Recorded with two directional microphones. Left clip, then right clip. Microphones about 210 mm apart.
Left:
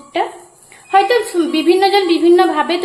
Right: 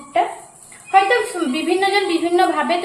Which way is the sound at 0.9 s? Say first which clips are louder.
Left 2 dB; 50° left (ahead or behind).